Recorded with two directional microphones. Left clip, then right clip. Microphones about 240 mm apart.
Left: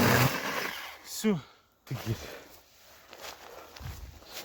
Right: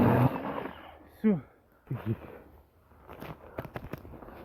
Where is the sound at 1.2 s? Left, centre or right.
Left.